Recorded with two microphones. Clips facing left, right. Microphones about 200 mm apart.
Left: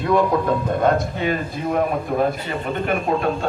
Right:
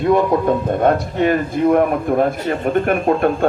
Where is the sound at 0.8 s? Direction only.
50° right (ahead or behind).